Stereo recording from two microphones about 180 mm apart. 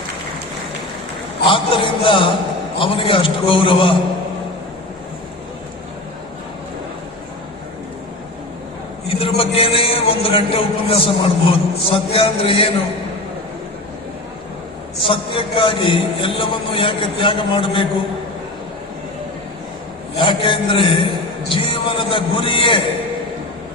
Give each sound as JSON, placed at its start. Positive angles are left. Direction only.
{"t": 1.5, "sound": "a man's voice", "side_deg": 30}
{"t": 9.0, "sound": "a man's voice", "side_deg": 30}
{"t": 15.0, "sound": "a man's voice", "side_deg": 30}
{"t": 20.1, "sound": "a man's voice", "side_deg": 30}